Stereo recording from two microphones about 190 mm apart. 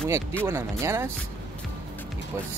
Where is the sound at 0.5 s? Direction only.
15° right (ahead or behind).